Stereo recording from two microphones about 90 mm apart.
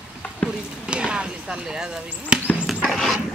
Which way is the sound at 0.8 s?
10° right (ahead or behind).